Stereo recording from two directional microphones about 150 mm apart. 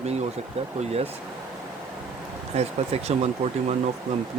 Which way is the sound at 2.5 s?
45° right (ahead or behind).